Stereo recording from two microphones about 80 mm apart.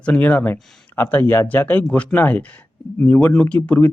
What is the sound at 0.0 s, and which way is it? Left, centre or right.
Speech, centre.